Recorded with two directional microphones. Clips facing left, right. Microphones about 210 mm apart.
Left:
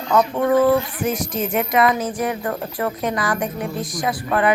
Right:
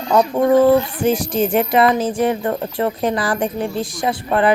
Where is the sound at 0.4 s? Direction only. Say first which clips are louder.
Right 5 dB; 30° right (ahead or behind).